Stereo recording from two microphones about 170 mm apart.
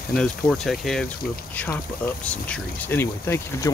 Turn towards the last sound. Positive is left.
turn(degrees=15)  # may be behind; listen again after turning